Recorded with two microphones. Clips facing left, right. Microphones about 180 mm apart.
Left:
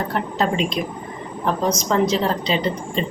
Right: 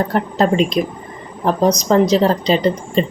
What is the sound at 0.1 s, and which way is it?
A woman's voice, 40° right (ahead or behind).